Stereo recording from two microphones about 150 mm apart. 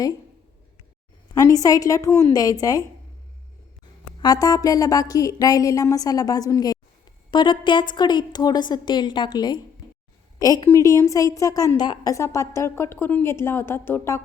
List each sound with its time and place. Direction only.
1.4 s a woman's voice: 25° left (ahead or behind)
4.0 s a woman's voice: 25° left (ahead or behind)